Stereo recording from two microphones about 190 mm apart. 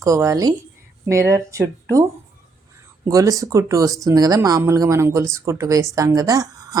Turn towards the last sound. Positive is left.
turn(degrees=-20)  # may be behind; listen again after turning